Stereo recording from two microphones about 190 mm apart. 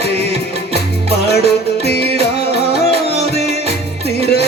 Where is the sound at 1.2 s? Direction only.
60° left (ahead or behind).